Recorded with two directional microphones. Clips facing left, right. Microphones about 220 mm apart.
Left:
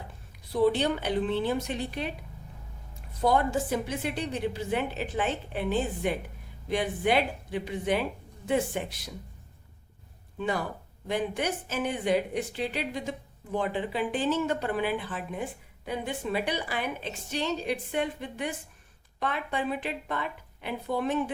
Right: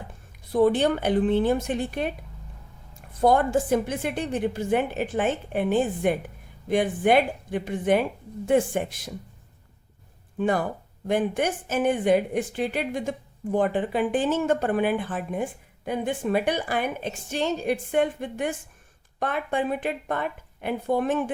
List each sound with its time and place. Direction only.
0.5 s speech: 50° right (ahead or behind)
3.2 s speech: 50° right (ahead or behind)
10.3 s speech: 50° right (ahead or behind)